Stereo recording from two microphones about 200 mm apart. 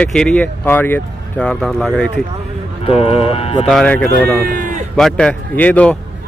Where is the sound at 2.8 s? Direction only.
30° left (ahead or behind).